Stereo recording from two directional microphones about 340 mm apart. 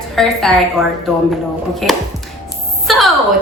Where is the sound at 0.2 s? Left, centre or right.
Centre.